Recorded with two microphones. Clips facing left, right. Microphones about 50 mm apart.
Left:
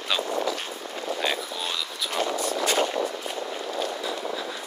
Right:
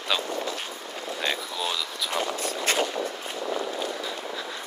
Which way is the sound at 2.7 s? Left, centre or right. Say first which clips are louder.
Even; right.